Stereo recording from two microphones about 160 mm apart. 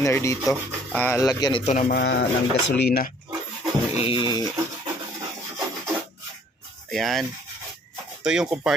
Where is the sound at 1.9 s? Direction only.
90° left.